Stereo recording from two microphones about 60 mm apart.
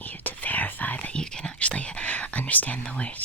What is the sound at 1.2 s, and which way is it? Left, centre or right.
Speech, centre.